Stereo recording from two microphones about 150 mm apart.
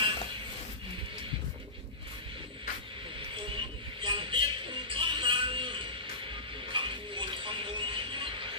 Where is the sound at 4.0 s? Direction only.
35° right (ahead or behind).